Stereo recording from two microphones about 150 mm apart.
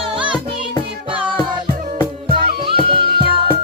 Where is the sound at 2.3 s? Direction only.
35° right (ahead or behind).